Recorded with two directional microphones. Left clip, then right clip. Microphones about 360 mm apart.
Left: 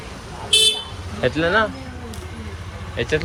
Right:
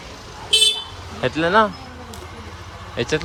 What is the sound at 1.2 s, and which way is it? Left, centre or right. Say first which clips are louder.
Speech: right 2 dB; centre.